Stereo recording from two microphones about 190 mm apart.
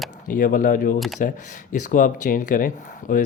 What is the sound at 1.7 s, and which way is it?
Speech, 45° left (ahead or behind).